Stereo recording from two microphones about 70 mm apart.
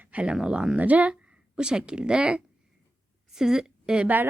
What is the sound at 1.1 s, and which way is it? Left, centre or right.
A woman's voice, centre.